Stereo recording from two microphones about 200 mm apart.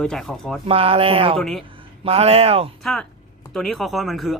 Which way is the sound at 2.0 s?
30° right (ahead or behind).